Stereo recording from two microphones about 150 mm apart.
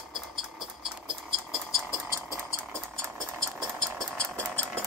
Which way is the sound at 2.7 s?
15° right (ahead or behind).